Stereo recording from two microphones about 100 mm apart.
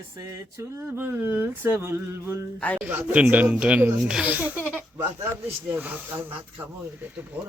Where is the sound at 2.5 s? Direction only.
15° left (ahead or behind).